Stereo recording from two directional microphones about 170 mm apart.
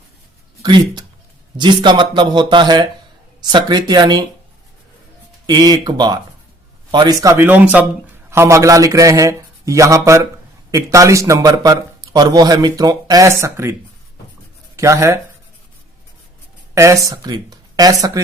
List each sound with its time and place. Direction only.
0.6 s speech: 25° right (ahead or behind)
5.5 s speech: 25° right (ahead or behind)
14.8 s speech: 15° right (ahead or behind)
16.7 s speech: 20° right (ahead or behind)